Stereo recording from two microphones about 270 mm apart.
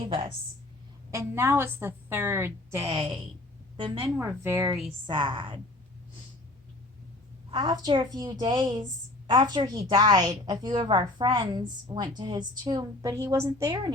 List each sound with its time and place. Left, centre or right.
0.1 s a woman's voice: centre
7.5 s a woman's voice: centre